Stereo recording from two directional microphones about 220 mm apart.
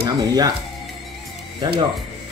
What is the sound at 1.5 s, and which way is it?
Speech, 25° right (ahead or behind).